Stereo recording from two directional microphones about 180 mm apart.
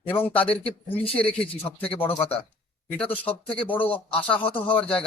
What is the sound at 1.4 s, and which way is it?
Speech, 30° left (ahead or behind).